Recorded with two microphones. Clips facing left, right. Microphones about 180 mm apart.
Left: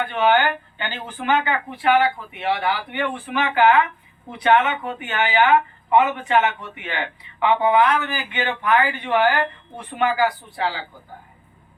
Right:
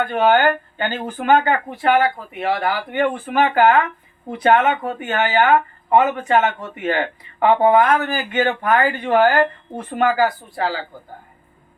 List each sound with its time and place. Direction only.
0.0 s speech: 45° right (ahead or behind)